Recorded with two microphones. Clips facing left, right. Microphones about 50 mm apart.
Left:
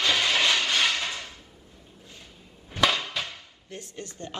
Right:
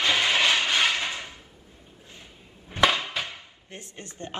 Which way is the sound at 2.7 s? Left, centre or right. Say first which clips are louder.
Right 2 dB; centre.